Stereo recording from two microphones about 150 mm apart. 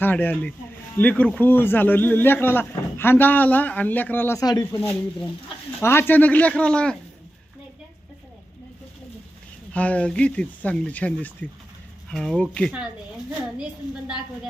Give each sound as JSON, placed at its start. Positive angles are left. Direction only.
{"t": 0.0, "sound": "a man's voice", "side_deg": 10}
{"t": 4.4, "sound": "a man's voice", "side_deg": 25}
{"t": 9.7, "sound": "a man's voice", "side_deg": 10}
{"t": 12.7, "sound": "a woman's voice", "side_deg": -5}